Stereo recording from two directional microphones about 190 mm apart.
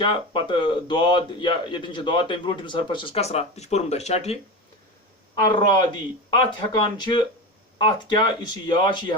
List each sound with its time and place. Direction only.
0.0 s speech: 25° left (ahead or behind)
5.3 s speech: 20° left (ahead or behind)